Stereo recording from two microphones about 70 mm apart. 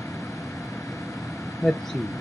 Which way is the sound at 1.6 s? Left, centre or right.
Left.